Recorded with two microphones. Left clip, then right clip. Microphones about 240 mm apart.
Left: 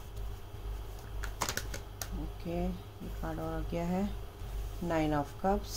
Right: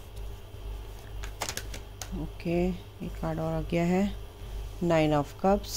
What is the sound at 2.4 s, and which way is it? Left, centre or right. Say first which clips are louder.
Speech: right 9 dB; right.